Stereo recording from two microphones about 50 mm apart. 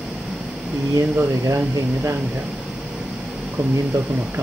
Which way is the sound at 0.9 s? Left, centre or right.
Right.